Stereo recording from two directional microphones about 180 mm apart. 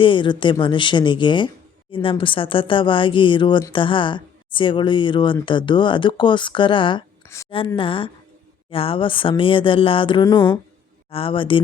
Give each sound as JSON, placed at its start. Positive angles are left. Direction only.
{"t": 0.0, "sound": "speech", "side_deg": 25}